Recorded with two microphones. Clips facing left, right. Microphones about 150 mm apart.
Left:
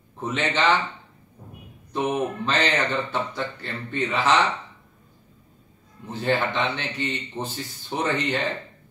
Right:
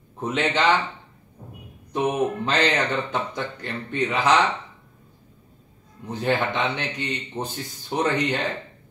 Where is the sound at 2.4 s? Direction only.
15° right (ahead or behind).